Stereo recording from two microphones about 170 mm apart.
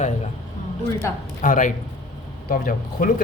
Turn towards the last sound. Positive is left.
turn(degrees=55)  # may be behind; listen again after turning